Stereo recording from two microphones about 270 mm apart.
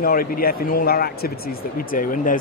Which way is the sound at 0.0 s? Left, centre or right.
Left.